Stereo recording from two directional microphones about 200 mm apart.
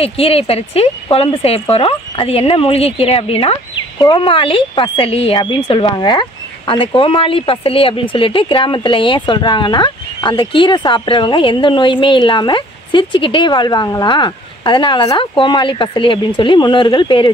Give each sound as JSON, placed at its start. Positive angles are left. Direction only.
{"t": 0.0, "sound": "speech", "side_deg": 30}